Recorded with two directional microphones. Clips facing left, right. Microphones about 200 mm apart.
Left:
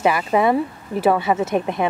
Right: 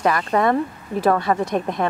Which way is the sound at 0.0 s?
5° left (ahead or behind).